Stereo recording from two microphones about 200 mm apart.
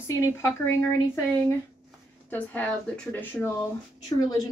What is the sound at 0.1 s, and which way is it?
A woman's voice, 15° left (ahead or behind).